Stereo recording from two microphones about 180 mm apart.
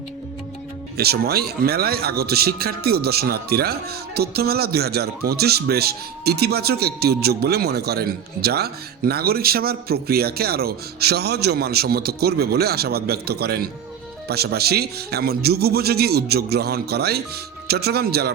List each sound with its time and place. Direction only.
0.9 s speech: 60° right (ahead or behind)